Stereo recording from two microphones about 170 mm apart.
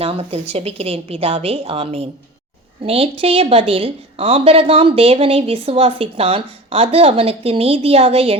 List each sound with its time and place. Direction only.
0.0 s a woman's voice: 35° right (ahead or behind)